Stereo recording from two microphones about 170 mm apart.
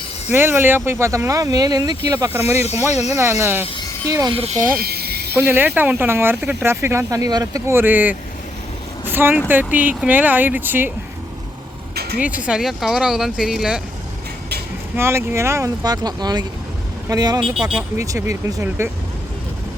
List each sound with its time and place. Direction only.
0.3 s speech: 15° right (ahead or behind)
2.9 s speech: 40° left (ahead or behind)
3.2 s speech: 15° right (ahead or behind)
4.4 s speech: 40° right (ahead or behind)
4.7 s a sound: 65° right (ahead or behind)
5.4 s speech: 10° right (ahead or behind)
9.1 s speech: 10° right (ahead or behind)
11.9 s a sound: 70° right (ahead or behind)
12.2 s speech: 10° right (ahead or behind)
14.9 s speech: 15° right (ahead or behind)
17.4 s speech: 5° right (ahead or behind)
17.9 s speech: 20° right (ahead or behind)